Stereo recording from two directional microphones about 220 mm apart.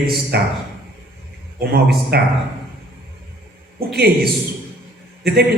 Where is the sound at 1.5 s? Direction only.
45° right (ahead or behind).